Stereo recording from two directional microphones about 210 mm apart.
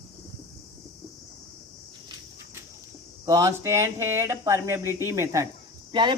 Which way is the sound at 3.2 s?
15° right (ahead or behind).